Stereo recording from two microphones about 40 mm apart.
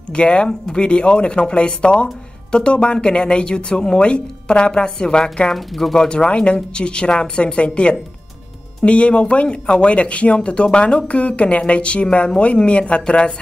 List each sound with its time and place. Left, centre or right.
0.1 s speech: left
5.2 s speech: centre
5.9 s speech: left